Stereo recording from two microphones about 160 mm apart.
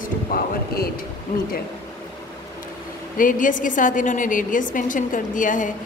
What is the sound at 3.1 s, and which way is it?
A woman's voice, 55° left (ahead or behind).